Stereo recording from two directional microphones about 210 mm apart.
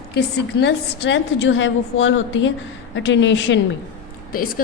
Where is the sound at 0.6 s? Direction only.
55° left (ahead or behind).